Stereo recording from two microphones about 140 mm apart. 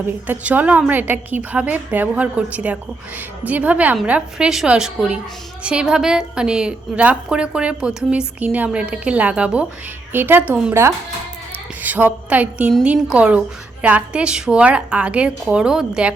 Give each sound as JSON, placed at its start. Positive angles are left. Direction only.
{"t": 0.3, "sound": "a woman's voice", "side_deg": -10}